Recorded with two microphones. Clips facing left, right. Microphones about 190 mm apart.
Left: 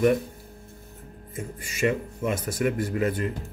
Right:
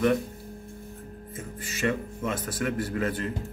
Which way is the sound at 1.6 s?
10° left (ahead or behind).